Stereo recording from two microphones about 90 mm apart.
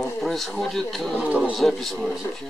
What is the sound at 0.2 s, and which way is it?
Speech, centre (ahead or behind).